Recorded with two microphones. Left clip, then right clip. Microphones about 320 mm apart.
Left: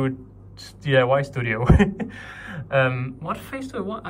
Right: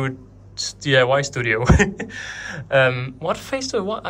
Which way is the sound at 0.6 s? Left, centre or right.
Centre.